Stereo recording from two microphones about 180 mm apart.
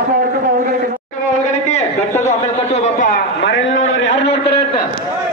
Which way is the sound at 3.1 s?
80° left.